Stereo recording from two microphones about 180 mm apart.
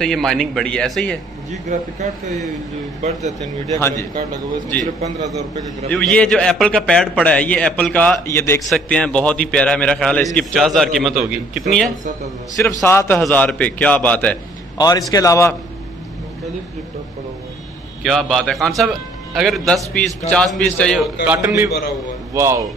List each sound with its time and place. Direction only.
0.0 s a man's voice: centre (ahead or behind)
1.5 s speech: 40° right (ahead or behind)
3.7 s a man's voice: 15° left (ahead or behind)
5.9 s a man's voice: 5° left (ahead or behind)
8.6 s a man's voice: 5° left (ahead or behind)
12.8 s a man's voice: 15° left (ahead or behind)
14.8 s a man's voice: 20° left (ahead or behind)
18.0 s a man's voice: 5° left (ahead or behind)
21.4 s speech: 15° right (ahead or behind)
21.6 s a man's voice: 65° left (ahead or behind)
22.3 s speech: 15° right (ahead or behind)